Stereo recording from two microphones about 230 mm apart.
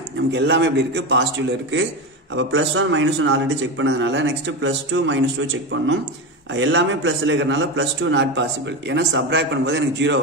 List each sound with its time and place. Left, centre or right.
0.3 s a man's voice: right
2.3 s a man's voice: right
6.5 s a man's voice: right